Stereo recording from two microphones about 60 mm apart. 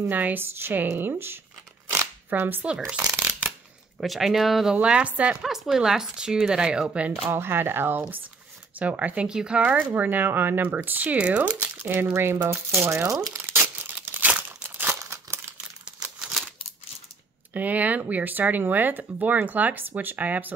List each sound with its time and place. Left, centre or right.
0.1 s speech: right
2.9 s speech: centre
3.2 s shuffling cards: right
4.0 s speech: centre
4.8 s speech: centre
5.4 s speech: centre
7.2 s speech: right
8.7 s speech: right
9.3 s speech: centre
9.6 s speech: right
13.1 s speech: right
13.4 s crumpling: right
17.6 s speech: right